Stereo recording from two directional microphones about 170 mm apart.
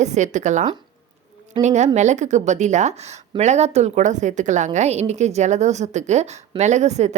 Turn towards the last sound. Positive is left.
turn(degrees=-40)  # may be behind; listen again after turning